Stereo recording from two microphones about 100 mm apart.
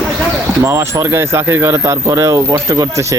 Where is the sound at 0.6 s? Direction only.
30° right (ahead or behind).